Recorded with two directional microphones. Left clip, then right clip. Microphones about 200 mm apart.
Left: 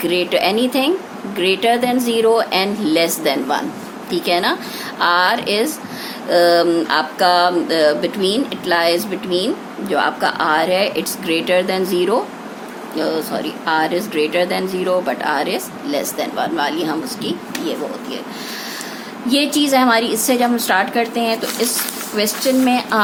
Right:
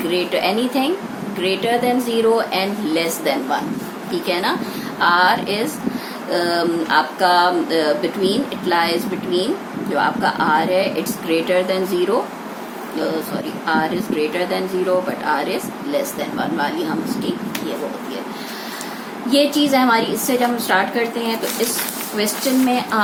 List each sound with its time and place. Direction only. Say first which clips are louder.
0.1 s speech: left 2 dB; 55° left (ahead or behind)
13.7 s speech: left 2 dB; 55° left (ahead or behind)
19.3 s a woman's voice: even; 55° left (ahead or behind)